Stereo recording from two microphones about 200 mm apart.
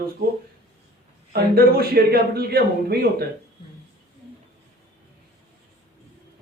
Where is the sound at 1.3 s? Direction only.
50° right (ahead or behind).